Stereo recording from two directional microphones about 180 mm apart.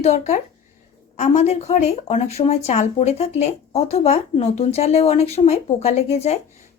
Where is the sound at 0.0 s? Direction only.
40° left (ahead or behind).